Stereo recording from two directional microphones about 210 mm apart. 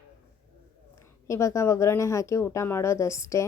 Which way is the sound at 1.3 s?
15° left (ahead or behind).